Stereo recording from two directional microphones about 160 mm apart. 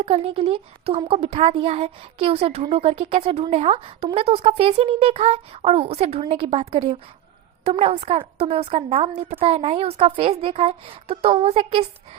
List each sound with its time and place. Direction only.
0.0 s a woman's voice: 35° right (ahead or behind)